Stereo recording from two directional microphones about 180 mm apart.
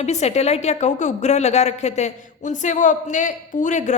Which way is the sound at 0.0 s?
40° left (ahead or behind).